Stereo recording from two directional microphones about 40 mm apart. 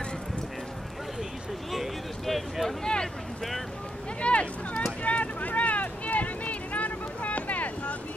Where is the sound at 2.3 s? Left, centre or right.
Centre.